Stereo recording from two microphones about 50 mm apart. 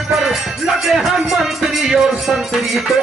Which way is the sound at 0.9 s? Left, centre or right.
Centre.